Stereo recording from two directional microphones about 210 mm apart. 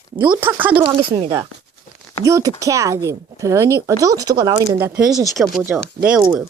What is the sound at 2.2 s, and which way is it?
Speech, 15° right (ahead or behind).